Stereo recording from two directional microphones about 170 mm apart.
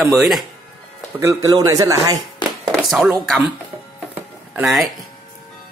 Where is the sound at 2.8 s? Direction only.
5° right (ahead or behind).